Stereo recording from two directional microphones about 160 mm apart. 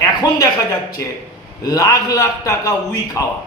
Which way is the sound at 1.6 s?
20° left (ahead or behind).